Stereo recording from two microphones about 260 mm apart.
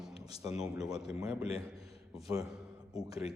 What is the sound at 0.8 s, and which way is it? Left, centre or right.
A man's voice, centre.